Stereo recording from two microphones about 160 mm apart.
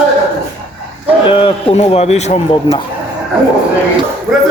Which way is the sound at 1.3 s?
35° left (ahead or behind).